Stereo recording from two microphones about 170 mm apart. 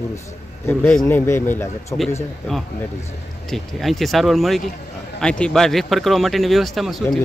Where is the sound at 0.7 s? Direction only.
10° left (ahead or behind).